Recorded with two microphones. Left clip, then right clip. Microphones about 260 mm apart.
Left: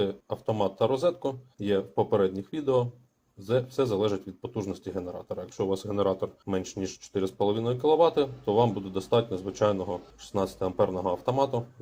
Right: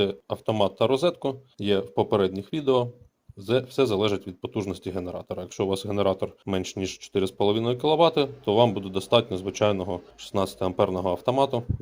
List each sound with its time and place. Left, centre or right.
0.0 s speech: right